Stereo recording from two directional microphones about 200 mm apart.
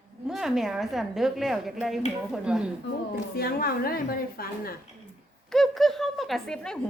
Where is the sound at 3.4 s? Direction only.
50° left (ahead or behind).